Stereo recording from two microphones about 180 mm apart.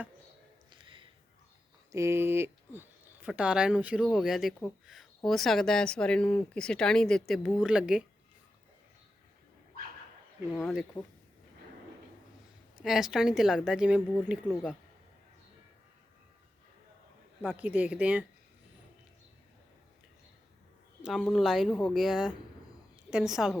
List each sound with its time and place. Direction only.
0.7 s a sound: 30° right (ahead or behind)
1.9 s speech: 15° right (ahead or behind)
11.0 s speech: 10° left (ahead or behind)
12.8 s speech: centre (ahead or behind)
17.4 s speech: 10° right (ahead or behind)
21.0 s a woman's voice: 5° right (ahead or behind)